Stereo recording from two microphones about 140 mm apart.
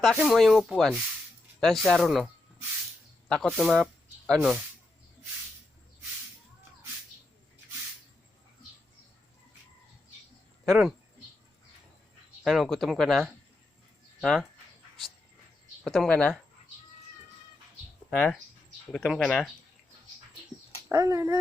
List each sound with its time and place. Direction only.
0.0 s speech: centre (ahead or behind)
10.7 s speech: centre (ahead or behind)
12.5 s speech: centre (ahead or behind)
15.8 s speech: 5° left (ahead or behind)
18.1 s speech: 5° left (ahead or behind)
20.9 s speech: 25° right (ahead or behind)